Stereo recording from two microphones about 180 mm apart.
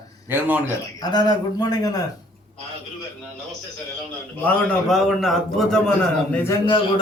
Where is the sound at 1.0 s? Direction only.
20° left (ahead or behind).